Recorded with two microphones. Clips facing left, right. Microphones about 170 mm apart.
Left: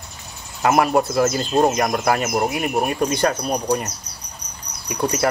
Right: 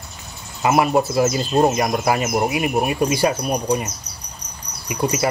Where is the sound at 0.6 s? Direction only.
5° right (ahead or behind).